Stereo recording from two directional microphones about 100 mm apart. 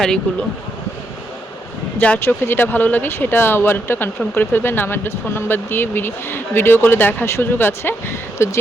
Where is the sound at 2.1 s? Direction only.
25° left (ahead or behind).